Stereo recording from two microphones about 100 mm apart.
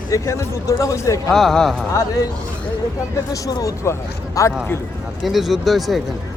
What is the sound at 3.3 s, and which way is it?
Speech, 35° left (ahead or behind).